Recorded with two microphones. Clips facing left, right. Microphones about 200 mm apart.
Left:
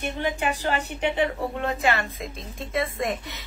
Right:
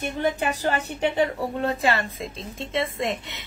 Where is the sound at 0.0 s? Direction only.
40° right (ahead or behind).